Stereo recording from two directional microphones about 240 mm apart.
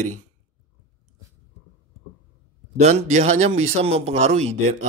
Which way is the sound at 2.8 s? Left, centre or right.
Right.